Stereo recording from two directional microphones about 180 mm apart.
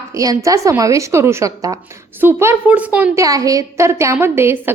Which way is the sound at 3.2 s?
20° right (ahead or behind).